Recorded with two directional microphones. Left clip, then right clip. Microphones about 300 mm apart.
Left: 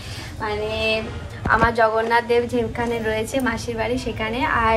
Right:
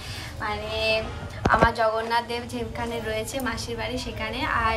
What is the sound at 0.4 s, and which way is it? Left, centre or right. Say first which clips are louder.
A woman's voice: left 4 dB; centre.